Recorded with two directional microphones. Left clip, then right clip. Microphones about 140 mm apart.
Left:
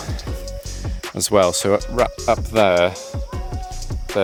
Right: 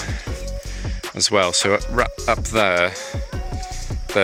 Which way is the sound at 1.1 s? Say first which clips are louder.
Left 1 dB; 50° left (ahead or behind).